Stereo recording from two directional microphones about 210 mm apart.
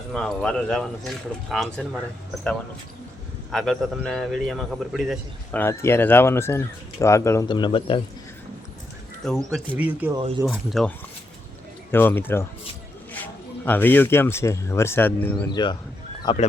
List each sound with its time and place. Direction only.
0.1 s speech: centre (ahead or behind)
3.5 s a man's voice: centre (ahead or behind); by 8.0 s 25° left (ahead or behind)
9.2 s speech: centre (ahead or behind)
11.9 s a man's voice: 10° left (ahead or behind)
13.7 s a man's voice: 10° left (ahead or behind); by 16.5 s 25° left (ahead or behind)